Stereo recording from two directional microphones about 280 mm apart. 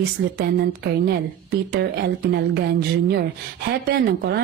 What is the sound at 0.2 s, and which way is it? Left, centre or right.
Speech, right.